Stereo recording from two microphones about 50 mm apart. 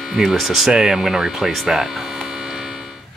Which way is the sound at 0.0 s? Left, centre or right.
Centre.